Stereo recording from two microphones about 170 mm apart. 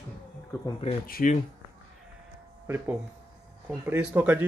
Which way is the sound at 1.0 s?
60° left (ahead or behind).